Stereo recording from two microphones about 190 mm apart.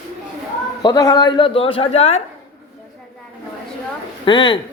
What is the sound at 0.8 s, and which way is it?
A man's voice, 20° left (ahead or behind).